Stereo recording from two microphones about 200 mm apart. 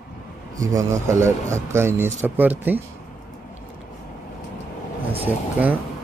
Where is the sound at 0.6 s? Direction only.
15° right (ahead or behind).